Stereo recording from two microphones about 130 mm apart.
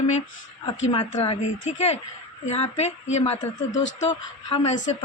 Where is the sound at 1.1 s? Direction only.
55° left (ahead or behind).